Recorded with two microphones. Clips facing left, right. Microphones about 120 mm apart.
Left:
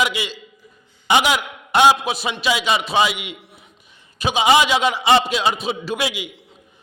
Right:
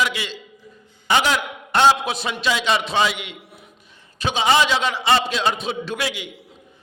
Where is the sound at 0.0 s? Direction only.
15° left (ahead or behind).